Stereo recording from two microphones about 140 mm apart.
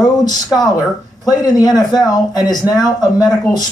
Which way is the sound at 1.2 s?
30° left (ahead or behind).